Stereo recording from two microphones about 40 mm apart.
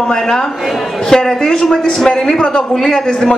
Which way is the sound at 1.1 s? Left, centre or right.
Centre.